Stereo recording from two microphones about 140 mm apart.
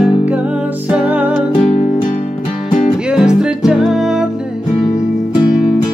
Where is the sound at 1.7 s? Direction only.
50° left (ahead or behind).